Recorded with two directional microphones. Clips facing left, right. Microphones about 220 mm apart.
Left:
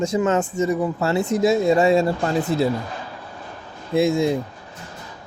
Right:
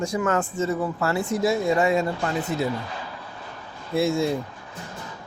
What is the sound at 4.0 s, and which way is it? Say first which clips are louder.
Speech: left 4 dB; 15° left (ahead or behind).